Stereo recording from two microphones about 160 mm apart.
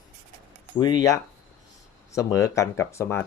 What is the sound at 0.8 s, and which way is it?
Speech, 25° left (ahead or behind).